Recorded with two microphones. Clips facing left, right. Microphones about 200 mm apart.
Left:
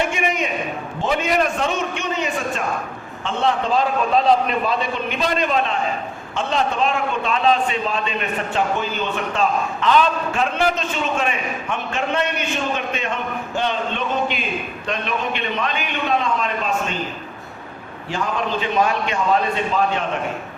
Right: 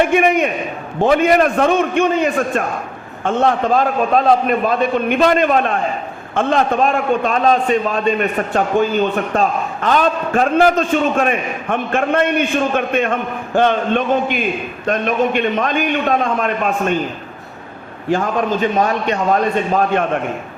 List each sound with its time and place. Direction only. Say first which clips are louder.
0.0 s a man's voice: right 8 dB; 55° right (ahead or behind)
9.3 s a man's voice: right 3 dB; 50° right (ahead or behind)
18.1 s a man's voice: right 6 dB; 50° right (ahead or behind)